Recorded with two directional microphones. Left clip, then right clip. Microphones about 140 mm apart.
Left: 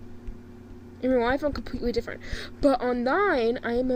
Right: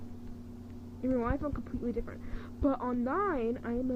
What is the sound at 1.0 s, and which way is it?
Speech, 25° left (ahead or behind).